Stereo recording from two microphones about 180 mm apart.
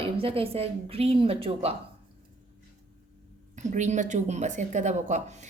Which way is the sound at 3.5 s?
40° right (ahead or behind).